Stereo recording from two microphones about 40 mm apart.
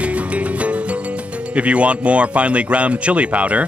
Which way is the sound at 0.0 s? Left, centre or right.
Right.